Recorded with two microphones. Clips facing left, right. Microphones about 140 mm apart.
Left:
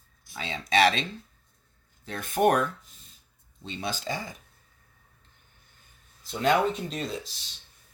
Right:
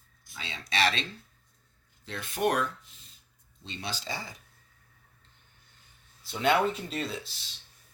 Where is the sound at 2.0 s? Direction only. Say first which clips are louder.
Left 5 dB; 50° left (ahead or behind).